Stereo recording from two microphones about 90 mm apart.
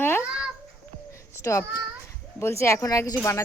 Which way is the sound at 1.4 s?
35° left (ahead or behind).